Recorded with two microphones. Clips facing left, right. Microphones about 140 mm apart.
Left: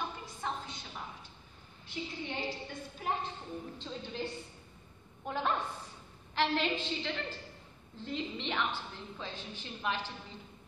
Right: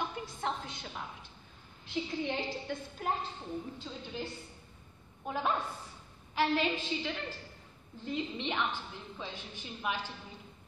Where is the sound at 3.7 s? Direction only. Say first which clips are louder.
Left 1 dB; 10° right (ahead or behind).